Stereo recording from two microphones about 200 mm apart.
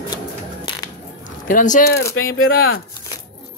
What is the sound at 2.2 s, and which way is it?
Speech, 90° left.